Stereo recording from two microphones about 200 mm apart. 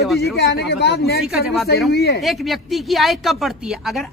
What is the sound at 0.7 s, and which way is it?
Speech, 55° left (ahead or behind).